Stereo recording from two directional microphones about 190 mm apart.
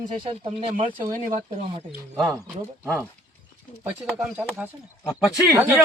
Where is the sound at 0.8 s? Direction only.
25° right (ahead or behind).